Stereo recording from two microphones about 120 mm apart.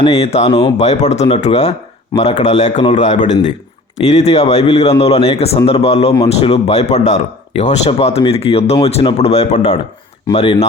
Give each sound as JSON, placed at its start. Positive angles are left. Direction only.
{"t": 0.0, "sound": "speech", "side_deg": 60}
{"t": 2.2, "sound": "a man's voice", "side_deg": 50}
{"t": 4.0, "sound": "speech", "side_deg": 65}
{"t": 7.9, "sound": "speech", "side_deg": 60}
{"t": 10.3, "sound": "speech", "side_deg": 50}